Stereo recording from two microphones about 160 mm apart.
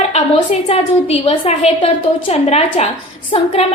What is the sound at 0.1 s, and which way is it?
A woman's voice, 40° left (ahead or behind).